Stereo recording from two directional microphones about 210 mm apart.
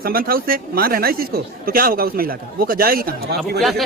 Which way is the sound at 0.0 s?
45° right (ahead or behind).